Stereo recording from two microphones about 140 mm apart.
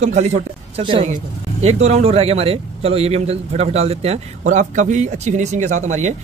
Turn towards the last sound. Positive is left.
turn(degrees=-55)  # may be behind; listen again after turning